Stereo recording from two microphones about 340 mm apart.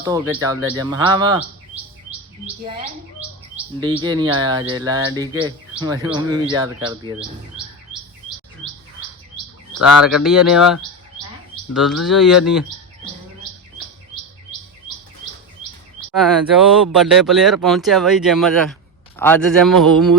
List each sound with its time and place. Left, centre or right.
0.0 s speech: centre
3.5 s speech: centre
8.6 s chirp: centre
10.0 s speech: centre
11.7 s speech: centre
16.0 s speech: centre